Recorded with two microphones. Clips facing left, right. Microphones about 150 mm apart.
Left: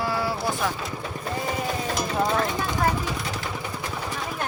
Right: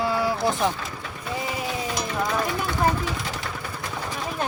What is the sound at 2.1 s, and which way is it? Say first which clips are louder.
Speech: left 2 dB; 25° left (ahead or behind).